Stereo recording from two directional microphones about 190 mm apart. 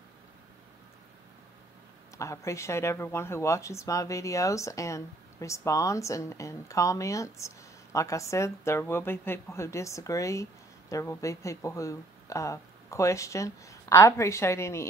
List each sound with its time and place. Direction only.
2.1 s speech: 15° left (ahead or behind)